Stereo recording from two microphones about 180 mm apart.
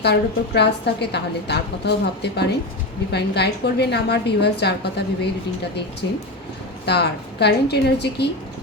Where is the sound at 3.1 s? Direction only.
65° left (ahead or behind).